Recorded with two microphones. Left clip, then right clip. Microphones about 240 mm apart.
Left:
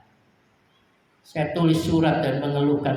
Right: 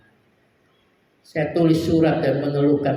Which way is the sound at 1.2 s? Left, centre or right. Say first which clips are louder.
Right 4 dB; left.